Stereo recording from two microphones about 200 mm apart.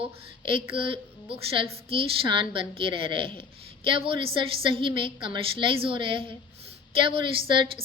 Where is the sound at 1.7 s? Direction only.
25° right (ahead or behind).